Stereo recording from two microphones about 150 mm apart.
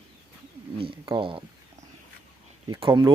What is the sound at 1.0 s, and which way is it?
Speech, 35° right (ahead or behind).